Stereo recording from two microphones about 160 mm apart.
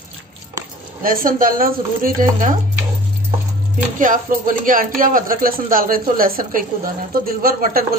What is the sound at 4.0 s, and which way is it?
Speech, 55° right (ahead or behind).